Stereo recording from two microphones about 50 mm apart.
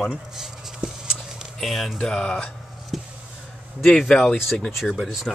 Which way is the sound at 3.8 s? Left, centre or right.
Centre.